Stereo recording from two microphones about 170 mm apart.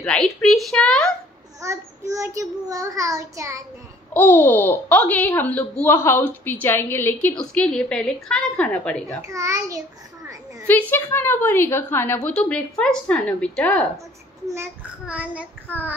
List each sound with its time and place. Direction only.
0.0 s speech: 5° left (ahead or behind)
1.6 s a child's voice: 20° right (ahead or behind)
4.1 s a child's voice: 10° left (ahead or behind)
9.0 s a child's voice: 20° right (ahead or behind)
10.7 s a child's voice: 10° left (ahead or behind)
14.5 s a child's voice: 10° right (ahead or behind)